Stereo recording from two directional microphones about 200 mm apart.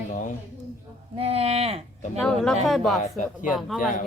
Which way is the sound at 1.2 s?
30° right (ahead or behind).